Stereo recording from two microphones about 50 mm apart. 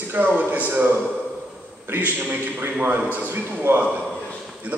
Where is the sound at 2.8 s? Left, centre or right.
Right.